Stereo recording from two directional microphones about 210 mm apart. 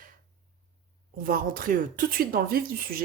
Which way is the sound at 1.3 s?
45° right (ahead or behind).